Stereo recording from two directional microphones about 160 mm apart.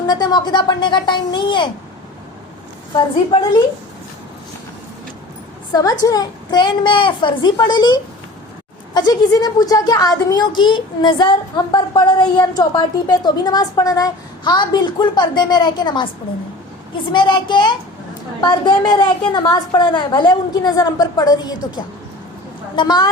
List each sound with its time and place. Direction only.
0.1 s a woman's voice: 25° left (ahead or behind)
2.9 s a woman's voice: 30° left (ahead or behind)
5.7 s a woman's voice: 25° left (ahead or behind)
17.1 s a woman's voice: 30° left (ahead or behind)
22.7 s a woman's voice: 30° left (ahead or behind)